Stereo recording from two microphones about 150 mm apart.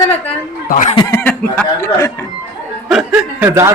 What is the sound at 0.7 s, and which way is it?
Speech, 55° left (ahead or behind).